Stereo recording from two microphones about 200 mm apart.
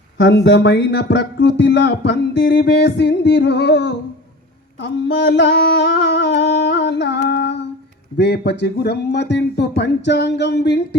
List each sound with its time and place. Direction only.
0.2 s speech: 65° left (ahead or behind)
4.8 s a sound: 60° left (ahead or behind)
8.2 s speech: 55° left (ahead or behind)